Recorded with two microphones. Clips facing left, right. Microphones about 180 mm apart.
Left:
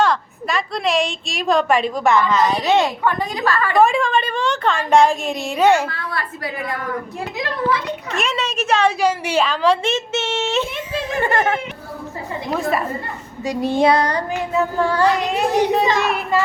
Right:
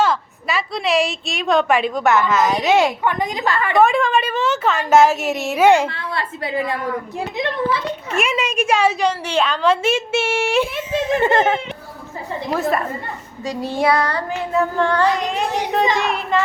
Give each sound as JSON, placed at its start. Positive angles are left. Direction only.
{"t": 0.0, "sound": "a woman's voice", "side_deg": -5}
{"t": 3.8, "sound": "a woman's voice", "side_deg": 0}
{"t": 5.7, "sound": "a woman's voice", "side_deg": -20}
{"t": 8.1, "sound": "a woman's voice", "side_deg": -10}
{"t": 9.0, "sound": "a woman's voice", "side_deg": 5}
{"t": 10.9, "sound": "a woman's voice", "side_deg": -20}
{"t": 13.4, "sound": "child singing", "side_deg": 15}
{"t": 14.5, "sound": "a woman's voice", "side_deg": 5}